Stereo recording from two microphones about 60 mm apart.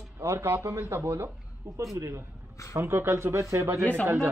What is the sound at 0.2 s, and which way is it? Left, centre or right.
Speech, right.